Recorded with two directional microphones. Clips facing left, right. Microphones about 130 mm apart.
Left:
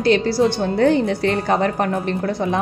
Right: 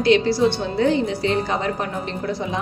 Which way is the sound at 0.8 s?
55° left (ahead or behind).